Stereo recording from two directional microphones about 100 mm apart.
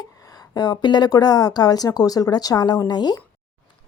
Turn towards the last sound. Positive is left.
turn(degrees=45)  # may be behind; listen again after turning